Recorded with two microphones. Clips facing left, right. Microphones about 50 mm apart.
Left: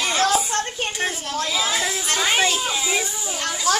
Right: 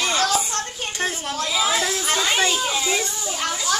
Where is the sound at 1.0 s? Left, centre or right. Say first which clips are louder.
Right 1 dB; centre.